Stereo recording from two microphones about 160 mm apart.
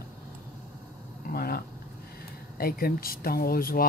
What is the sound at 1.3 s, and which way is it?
Speech, 75° left (ahead or behind).